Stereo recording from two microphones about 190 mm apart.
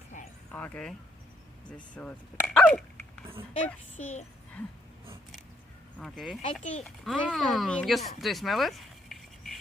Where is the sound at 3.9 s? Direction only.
40° left (ahead or behind).